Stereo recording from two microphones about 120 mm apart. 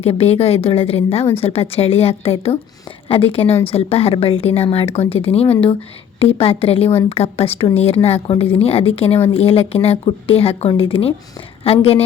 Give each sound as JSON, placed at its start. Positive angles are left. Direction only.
{"t": 0.0, "sound": "a woman's voice", "side_deg": 55}